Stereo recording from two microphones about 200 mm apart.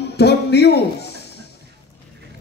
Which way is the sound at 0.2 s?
55° left (ahead or behind).